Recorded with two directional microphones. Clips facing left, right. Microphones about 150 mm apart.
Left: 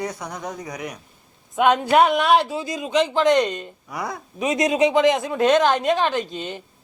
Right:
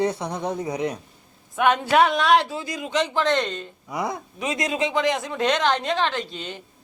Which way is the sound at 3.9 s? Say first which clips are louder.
Right 3 dB; 20° right (ahead or behind).